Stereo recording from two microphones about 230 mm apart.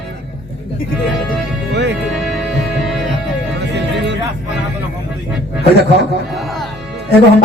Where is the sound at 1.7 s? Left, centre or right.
Right.